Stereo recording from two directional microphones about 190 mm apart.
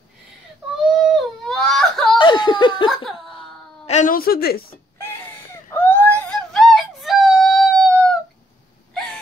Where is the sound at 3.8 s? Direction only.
40° left (ahead or behind).